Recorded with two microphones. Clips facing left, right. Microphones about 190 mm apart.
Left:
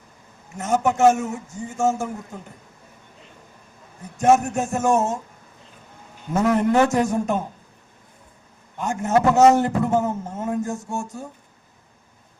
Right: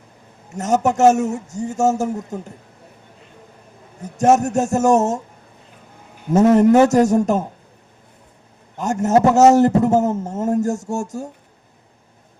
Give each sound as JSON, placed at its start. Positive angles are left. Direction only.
{"t": 0.5, "sound": "speech", "side_deg": -40}
{"t": 4.0, "sound": "speech", "side_deg": -40}
{"t": 6.5, "sound": "speech", "side_deg": -40}
{"t": 8.8, "sound": "speech", "side_deg": -40}